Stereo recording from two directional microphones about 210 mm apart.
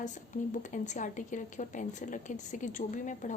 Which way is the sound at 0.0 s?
35° left (ahead or behind).